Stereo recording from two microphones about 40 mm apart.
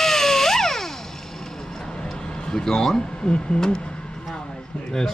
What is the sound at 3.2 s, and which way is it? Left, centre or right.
Speech, left.